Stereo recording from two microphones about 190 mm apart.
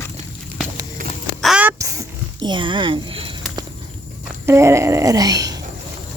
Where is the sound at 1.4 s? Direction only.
5° right (ahead or behind); by 3.3 s 30° right (ahead or behind).